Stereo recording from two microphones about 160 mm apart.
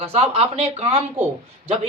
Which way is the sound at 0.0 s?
40° right (ahead or behind).